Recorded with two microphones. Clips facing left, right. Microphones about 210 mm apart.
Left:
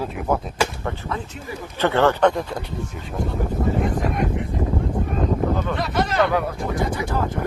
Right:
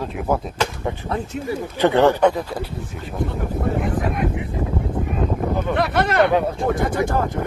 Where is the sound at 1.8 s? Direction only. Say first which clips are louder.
Right 2 dB; 15° right (ahead or behind).